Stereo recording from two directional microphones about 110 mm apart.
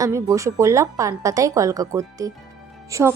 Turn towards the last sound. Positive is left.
turn(degrees=-25)  # may be behind; listen again after turning